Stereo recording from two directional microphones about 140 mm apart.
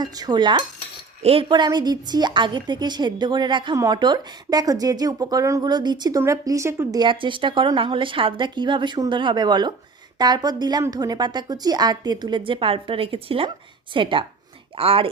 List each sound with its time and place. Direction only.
0.0 s a woman's voice: 30° right (ahead or behind)
7.0 s a woman's voice: 35° right (ahead or behind)